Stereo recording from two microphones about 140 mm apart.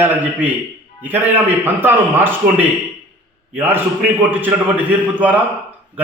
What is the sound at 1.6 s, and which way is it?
A man's voice, 15° right (ahead or behind).